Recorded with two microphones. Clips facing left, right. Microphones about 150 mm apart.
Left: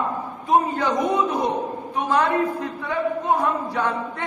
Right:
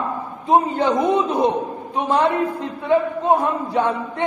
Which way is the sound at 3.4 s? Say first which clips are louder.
Right 3 dB; 25° right (ahead or behind).